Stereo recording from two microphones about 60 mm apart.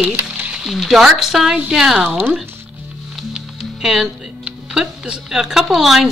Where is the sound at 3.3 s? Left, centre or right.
Centre.